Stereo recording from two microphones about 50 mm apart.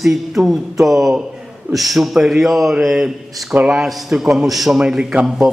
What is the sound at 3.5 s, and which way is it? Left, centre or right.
Speech, right.